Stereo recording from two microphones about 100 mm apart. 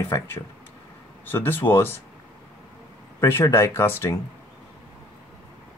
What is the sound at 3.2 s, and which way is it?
Speech, 25° left (ahead or behind).